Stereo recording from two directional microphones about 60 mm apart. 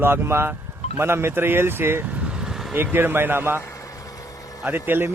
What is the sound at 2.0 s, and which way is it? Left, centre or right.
Vehicle, right.